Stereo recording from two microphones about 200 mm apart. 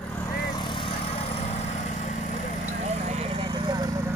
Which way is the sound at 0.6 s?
25° left (ahead or behind).